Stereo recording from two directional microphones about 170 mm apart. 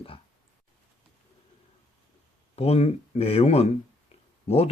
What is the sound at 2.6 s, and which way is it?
Speech, 40° left (ahead or behind).